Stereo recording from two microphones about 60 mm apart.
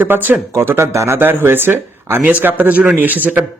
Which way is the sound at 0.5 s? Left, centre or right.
Right.